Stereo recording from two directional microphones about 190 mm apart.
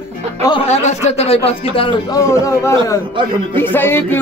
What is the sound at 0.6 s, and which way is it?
Speech, 35° left (ahead or behind).